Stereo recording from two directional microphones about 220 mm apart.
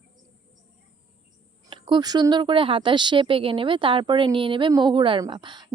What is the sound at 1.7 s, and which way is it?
A woman's voice, 20° right (ahead or behind).